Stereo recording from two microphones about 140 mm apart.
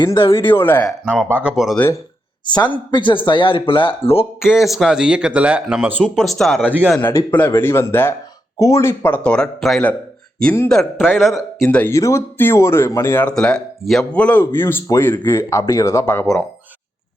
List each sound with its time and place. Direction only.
0.0 s speech: 35° left (ahead or behind)
0.3 s speech: 15° left (ahead or behind)
1.0 s speech: 5° right (ahead or behind)
2.7 s speech: 35° left (ahead or behind)
4.4 s speech: 5° right (ahead or behind)
7.0 s speech: 15° left (ahead or behind); by 11.7 s centre (ahead or behind)
11.7 s speech: 10° left (ahead or behind)
13.3 s speech: 5° left (ahead or behind)